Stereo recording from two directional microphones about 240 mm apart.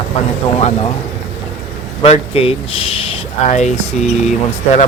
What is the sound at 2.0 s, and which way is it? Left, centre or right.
Speech, left.